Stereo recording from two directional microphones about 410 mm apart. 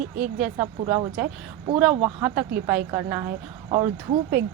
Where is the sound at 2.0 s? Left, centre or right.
Centre.